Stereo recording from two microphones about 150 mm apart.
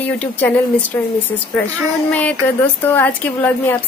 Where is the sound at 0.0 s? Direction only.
10° left (ahead or behind).